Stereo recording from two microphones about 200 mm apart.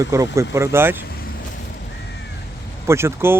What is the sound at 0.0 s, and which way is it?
Speech, 15° right (ahead or behind).